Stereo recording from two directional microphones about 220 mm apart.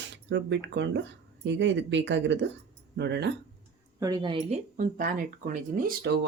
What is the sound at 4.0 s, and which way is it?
Speech, 20° right (ahead or behind).